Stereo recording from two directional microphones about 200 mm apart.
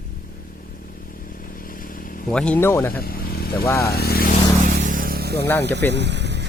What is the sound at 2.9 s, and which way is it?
Vehicle, 50° left (ahead or behind).